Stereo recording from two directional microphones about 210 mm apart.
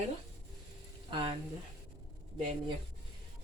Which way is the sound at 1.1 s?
25° right (ahead or behind).